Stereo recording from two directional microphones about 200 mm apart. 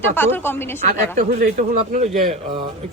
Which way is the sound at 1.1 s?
40° right (ahead or behind).